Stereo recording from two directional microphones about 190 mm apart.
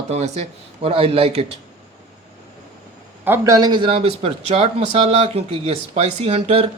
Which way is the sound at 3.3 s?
20° right (ahead or behind).